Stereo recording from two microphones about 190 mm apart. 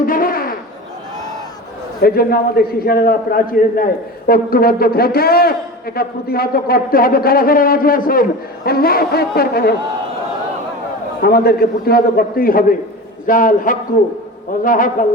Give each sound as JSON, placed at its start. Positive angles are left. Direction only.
{"t": 0.0, "sound": "a sound", "side_deg": 50}
{"t": 2.0, "sound": "a man's voice", "side_deg": 55}
{"t": 11.2, "sound": "a man's voice", "side_deg": 55}